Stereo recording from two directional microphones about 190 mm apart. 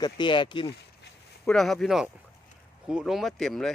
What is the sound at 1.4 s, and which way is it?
Speech, centre (ahead or behind).